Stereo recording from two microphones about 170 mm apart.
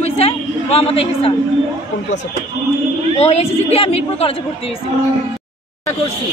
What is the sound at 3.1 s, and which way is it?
A man's voice, 40° left (ahead or behind).